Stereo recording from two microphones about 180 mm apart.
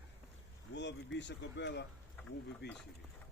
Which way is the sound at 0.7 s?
85° left.